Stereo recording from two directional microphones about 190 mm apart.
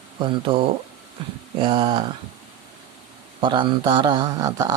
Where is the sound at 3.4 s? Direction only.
25° right (ahead or behind).